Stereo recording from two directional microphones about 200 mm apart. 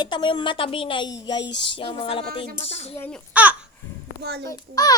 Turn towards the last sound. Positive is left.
turn(degrees=20)  # may be behind; listen again after turning